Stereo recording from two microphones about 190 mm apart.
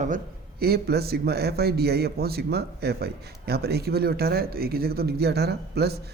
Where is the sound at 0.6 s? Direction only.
55° right (ahead or behind).